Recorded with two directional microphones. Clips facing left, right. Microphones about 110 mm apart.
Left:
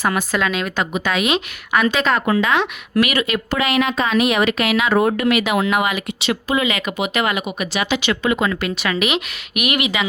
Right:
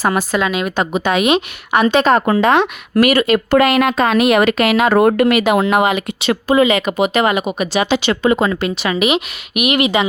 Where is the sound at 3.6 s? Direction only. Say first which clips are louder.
Right 4 dB; 50° right (ahead or behind).